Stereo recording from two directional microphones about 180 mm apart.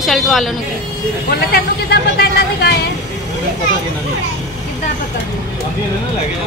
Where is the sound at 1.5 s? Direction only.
65° left (ahead or behind).